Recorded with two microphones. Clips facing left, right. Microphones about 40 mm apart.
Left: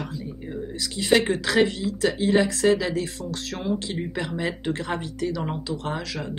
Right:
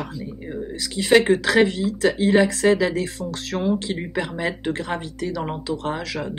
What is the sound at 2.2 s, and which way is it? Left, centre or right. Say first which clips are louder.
Speech: right 3 dB; right.